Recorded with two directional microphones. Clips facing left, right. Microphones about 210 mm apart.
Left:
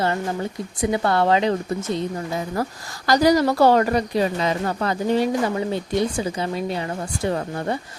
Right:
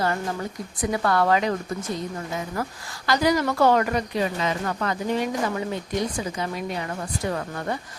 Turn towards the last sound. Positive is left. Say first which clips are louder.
# left 4 dB
turn(degrees=30)  # may be behind; listen again after turning